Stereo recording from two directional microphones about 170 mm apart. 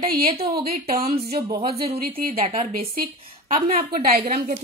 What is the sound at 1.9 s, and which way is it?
Speech, 60° right (ahead or behind).